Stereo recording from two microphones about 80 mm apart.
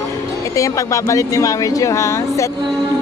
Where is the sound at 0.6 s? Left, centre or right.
Left.